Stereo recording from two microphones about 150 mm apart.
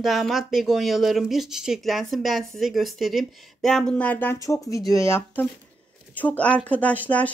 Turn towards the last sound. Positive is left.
turn(degrees=10)  # may be behind; listen again after turning